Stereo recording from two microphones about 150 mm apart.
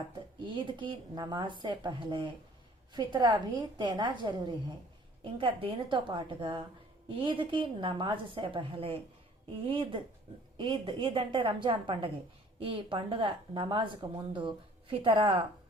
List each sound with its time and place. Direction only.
0.1 s a woman's voice: 30° right (ahead or behind)